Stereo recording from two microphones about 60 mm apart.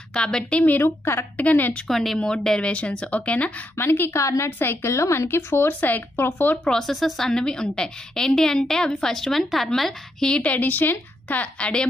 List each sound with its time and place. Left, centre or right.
0.1 s a woman's voice: centre
0.6 s a woman's voice: left
0.8 s a woman's voice: left
1.3 s a woman's voice: left
1.9 s a woman's voice: centre; by 3.5 s left
3.7 s speech: left
4.2 s a woman's voice: left
6.6 s a woman's voice: centre
6.9 s a woman's voice: centre
10.3 s a woman's voice: left